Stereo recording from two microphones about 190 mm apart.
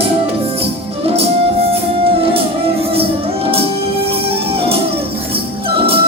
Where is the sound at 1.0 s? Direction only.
30° right (ahead or behind).